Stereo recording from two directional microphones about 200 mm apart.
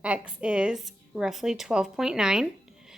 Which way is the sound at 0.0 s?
5° right (ahead or behind).